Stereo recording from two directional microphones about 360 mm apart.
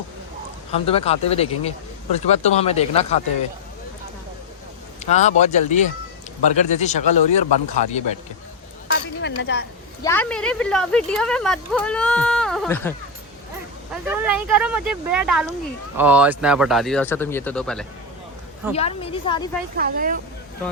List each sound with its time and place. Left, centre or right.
0.7 s speech: centre
5.0 s a man's voice: centre
8.9 s speech: left
10.0 s speech: centre
13.9 s speech: centre
18.7 s speech: centre
19.7 s speech: right